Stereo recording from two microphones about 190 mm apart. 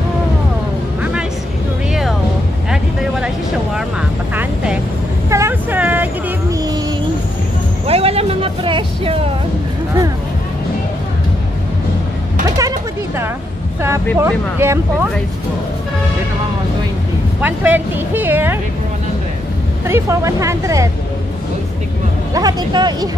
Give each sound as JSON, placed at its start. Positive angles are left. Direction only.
{"t": 5.3, "sound": "vehicle", "side_deg": -10}
{"t": 7.8, "sound": "music", "side_deg": -30}
{"t": 12.4, "sound": "a sound", "side_deg": -20}
{"t": 14.1, "sound": "speech", "side_deg": -15}
{"t": 17.4, "sound": "speech", "side_deg": -10}
{"t": 19.9, "sound": "speech", "side_deg": -15}
{"t": 22.3, "sound": "speech", "side_deg": -20}